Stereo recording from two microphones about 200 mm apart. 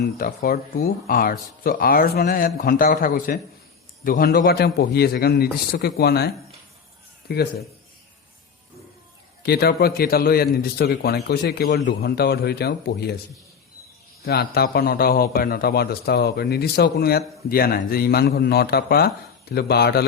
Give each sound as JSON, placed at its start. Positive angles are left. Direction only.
{"t": 0.3, "sound": "a man's voice", "side_deg": 45}
{"t": 9.4, "sound": "a man's voice", "side_deg": 55}
{"t": 14.3, "sound": "a man's voice", "side_deg": 50}